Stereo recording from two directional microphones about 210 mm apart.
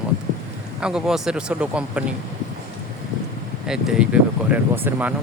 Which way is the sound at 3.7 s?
5° right (ahead or behind).